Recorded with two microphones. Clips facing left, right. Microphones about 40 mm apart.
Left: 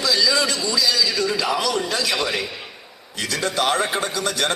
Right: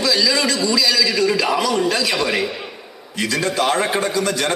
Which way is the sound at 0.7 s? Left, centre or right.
Right.